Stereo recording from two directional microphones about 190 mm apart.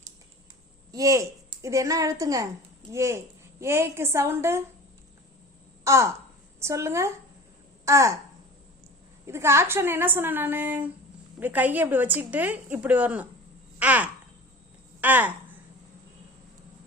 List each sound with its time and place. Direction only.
0.9 s a woman's voice: 15° right (ahead or behind)
5.8 s a woman's voice: 15° right (ahead or behind)
9.2 s a woman's voice: 15° right (ahead or behind)
13.7 s a sound: 10° right (ahead or behind)
15.0 s a woman's voice: 10° right (ahead or behind)